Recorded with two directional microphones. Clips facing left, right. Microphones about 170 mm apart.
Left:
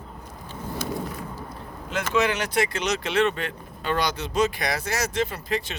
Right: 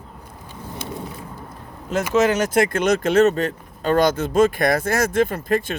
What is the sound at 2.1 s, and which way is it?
Speech, 40° right (ahead or behind).